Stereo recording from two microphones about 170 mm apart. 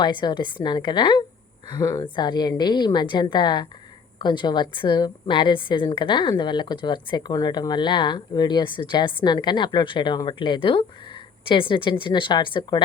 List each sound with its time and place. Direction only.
0.0 s a woman's voice: 25° left (ahead or behind)